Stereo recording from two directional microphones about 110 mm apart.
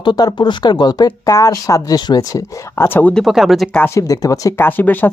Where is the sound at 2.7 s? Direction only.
20° left (ahead or behind).